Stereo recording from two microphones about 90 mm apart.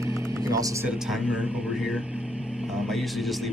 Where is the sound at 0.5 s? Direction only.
40° right (ahead or behind).